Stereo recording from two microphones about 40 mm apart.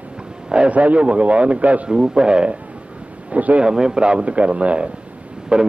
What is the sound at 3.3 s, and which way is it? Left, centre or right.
Speech, right.